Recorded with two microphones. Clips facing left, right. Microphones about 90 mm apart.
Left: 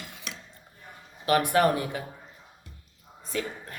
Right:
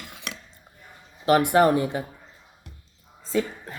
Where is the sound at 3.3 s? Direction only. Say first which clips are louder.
Right 7 dB; 20° right (ahead or behind).